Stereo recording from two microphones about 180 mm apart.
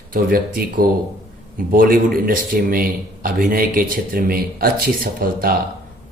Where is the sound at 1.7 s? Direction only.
50° right (ahead or behind).